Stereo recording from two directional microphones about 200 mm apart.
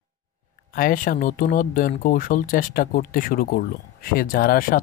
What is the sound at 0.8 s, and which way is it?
Speech, 45° left (ahead or behind).